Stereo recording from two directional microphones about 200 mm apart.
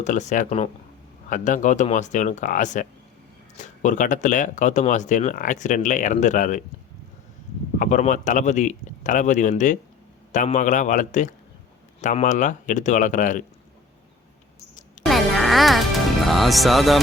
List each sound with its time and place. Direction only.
0.0 s speech: 35° left (ahead or behind)
7.8 s speech: 35° left (ahead or behind)
15.0 s music: centre (ahead or behind)
16.2 s speech: centre (ahead or behind)